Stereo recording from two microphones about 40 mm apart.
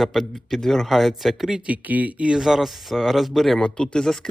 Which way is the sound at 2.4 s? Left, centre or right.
Centre.